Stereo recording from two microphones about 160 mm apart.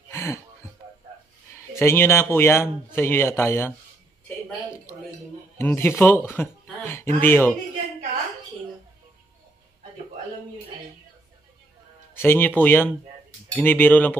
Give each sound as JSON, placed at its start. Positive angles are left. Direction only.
{"t": 0.1, "sound": "a sound", "side_deg": 15}
{"t": 1.7, "sound": "speech", "side_deg": 15}
{"t": 5.6, "sound": "speech", "side_deg": 15}
{"t": 12.2, "sound": "speech", "side_deg": 15}